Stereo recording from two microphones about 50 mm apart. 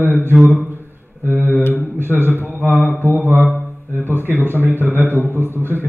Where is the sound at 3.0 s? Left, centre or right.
Right.